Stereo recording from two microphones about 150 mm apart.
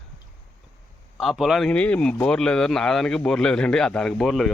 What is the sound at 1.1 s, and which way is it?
Speech, centre (ahead or behind).